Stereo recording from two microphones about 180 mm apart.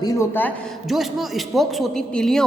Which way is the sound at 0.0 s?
15° left (ahead or behind).